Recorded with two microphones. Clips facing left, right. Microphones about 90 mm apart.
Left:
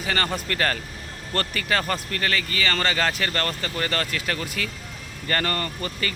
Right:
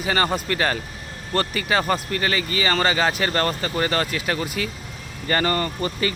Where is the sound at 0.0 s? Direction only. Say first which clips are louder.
Right 4 dB; 15° right (ahead or behind).